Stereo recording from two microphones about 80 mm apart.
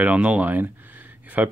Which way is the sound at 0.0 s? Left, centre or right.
Centre.